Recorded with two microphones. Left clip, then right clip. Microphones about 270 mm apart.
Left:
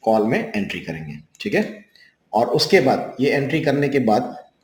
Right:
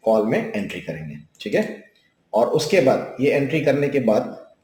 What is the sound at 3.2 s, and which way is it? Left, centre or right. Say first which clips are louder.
Speech: right 1 dB; left.